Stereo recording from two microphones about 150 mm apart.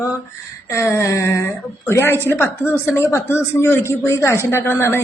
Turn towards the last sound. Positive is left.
turn(degrees=15)  # may be behind; listen again after turning